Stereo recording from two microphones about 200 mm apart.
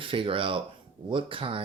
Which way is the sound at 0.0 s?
25° right (ahead or behind).